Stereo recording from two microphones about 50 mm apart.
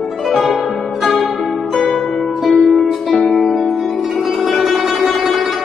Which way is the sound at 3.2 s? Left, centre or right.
Centre.